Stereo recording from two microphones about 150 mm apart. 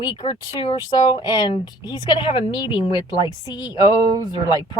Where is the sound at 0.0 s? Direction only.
30° left (ahead or behind).